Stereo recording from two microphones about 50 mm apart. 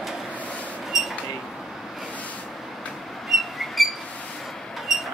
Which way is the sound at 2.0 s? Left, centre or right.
Left.